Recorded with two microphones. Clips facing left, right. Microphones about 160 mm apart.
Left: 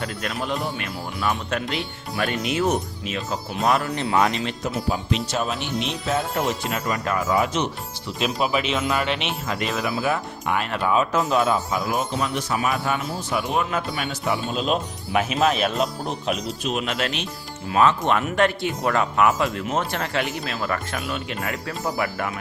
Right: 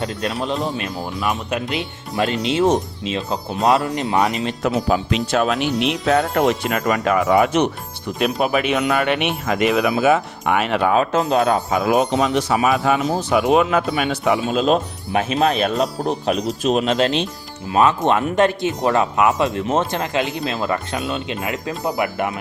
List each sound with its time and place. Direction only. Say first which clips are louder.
0.0 s speech: right 5 dB; 25° right (ahead or behind)
4.6 s speech: right 10 dB; 85° right
6.7 s speech: right 6 dB; 90° right; by 11.1 s 65° right (ahead or behind)
11.1 s speech: right 4 dB; 25° right (ahead or behind)
11.3 s speech: right 4 dB; 60° right (ahead or behind); by 14.6 s 90° right
14.6 s speech: right 6 dB; 40° right (ahead or behind); by 22.3 s 20° right (ahead or behind)